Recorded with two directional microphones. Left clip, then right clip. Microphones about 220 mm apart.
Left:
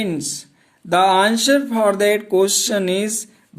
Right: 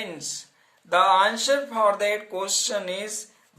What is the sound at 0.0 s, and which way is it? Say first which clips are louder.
Speech: left 9 dB; 40° left (ahead or behind).